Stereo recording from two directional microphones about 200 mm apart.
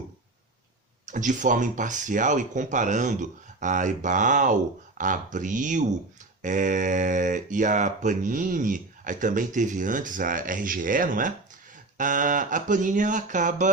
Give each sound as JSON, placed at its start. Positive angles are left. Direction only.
{"t": 1.0, "sound": "speech", "side_deg": -40}